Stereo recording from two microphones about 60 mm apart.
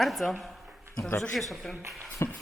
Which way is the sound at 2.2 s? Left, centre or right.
Left.